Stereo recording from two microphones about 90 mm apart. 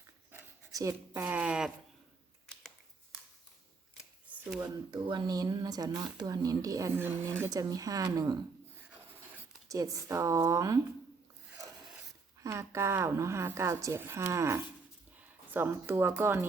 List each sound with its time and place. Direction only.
1.1 s speech: 20° right (ahead or behind)
4.3 s a sound: 15° right (ahead or behind)
4.9 s speech: 55° right (ahead or behind)
6.9 s a woman's voice: 25° right (ahead or behind)
7.5 s a woman's voice: 40° right (ahead or behind)
9.6 s a woman's voice: 40° right (ahead or behind)
12.4 s a woman's voice: 30° right (ahead or behind)
15.2 s speech: 20° right (ahead or behind)